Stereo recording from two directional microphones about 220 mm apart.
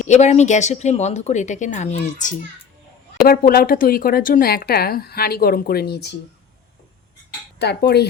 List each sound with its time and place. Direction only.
0.1 s speech: 30° left (ahead or behind); by 6.1 s 50° left (ahead or behind)
7.6 s speech: 45° left (ahead or behind)